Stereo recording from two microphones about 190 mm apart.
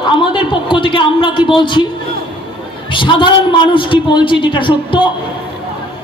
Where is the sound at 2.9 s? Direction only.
25° left (ahead or behind).